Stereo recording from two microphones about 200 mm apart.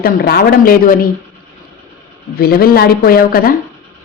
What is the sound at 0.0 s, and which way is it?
Speech, 50° left (ahead or behind).